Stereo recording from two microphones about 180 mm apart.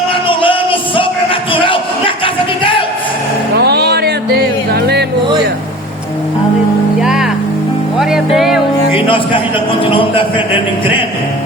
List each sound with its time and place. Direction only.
0.1 s music: 30° left (ahead or behind)
3.5 s music: 65° right (ahead or behind)
7.0 s music: 5° right (ahead or behind)
8.9 s music: 30° left (ahead or behind)
9.8 s a man's voice: 30° left (ahead or behind)